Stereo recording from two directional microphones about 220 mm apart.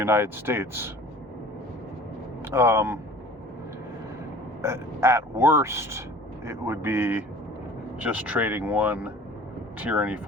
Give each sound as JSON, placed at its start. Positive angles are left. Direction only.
{"t": 0.0, "sound": "speech", "side_deg": -10}
{"t": 2.5, "sound": "speech", "side_deg": -10}
{"t": 4.6, "sound": "speech", "side_deg": -10}